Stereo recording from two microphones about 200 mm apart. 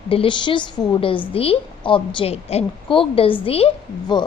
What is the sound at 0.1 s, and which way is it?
A woman's voice, 25° left (ahead or behind).